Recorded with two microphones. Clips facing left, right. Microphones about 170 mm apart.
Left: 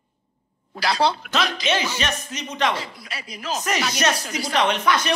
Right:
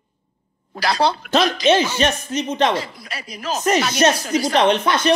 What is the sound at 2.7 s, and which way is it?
Speech, 40° right (ahead or behind).